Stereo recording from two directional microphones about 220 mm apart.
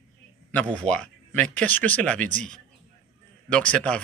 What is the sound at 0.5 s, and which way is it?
A man's voice, 5° left (ahead or behind).